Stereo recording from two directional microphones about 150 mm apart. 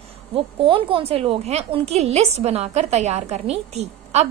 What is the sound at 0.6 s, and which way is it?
A woman's voice, 35° right (ahead or behind).